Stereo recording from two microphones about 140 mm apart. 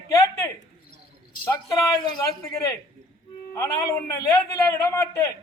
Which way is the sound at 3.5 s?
20° left (ahead or behind).